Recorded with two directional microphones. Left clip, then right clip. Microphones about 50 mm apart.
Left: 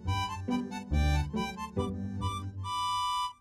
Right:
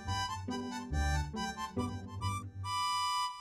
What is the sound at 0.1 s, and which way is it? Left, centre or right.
Music, left.